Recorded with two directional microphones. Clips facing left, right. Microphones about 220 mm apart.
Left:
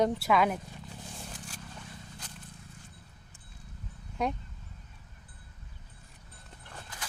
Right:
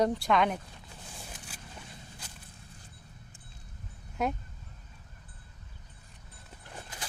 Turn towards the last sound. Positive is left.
turn(degrees=-25)  # may be behind; listen again after turning